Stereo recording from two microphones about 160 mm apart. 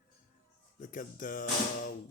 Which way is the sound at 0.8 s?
55° left (ahead or behind).